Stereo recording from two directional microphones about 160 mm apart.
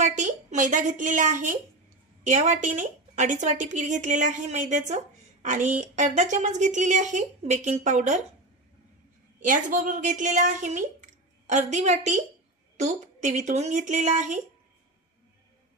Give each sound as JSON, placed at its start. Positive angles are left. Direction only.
{"t": 0.0, "sound": "a woman's voice", "side_deg": -50}
{"t": 9.4, "sound": "a woman's voice", "side_deg": -55}